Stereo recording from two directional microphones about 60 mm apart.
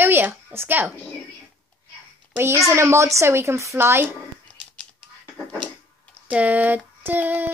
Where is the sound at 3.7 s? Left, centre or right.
Right.